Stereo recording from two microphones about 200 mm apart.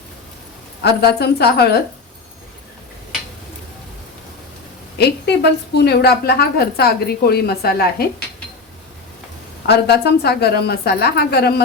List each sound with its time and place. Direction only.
0.8 s a woman's voice: 55° left (ahead or behind)
4.9 s a woman's voice: 55° left (ahead or behind)
9.6 s a woman's voice: 55° left (ahead or behind)